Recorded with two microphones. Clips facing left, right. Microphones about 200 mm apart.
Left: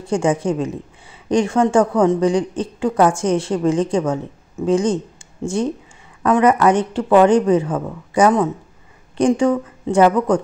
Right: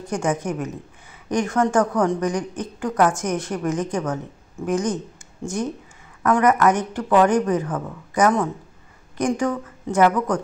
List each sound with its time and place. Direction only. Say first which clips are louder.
0.0 s speech: left 5 dB; 30° left (ahead or behind)